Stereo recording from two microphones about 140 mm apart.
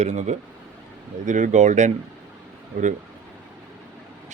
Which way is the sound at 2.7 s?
90° right.